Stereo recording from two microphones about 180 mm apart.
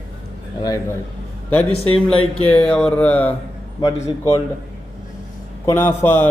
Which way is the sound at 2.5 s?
5° left (ahead or behind).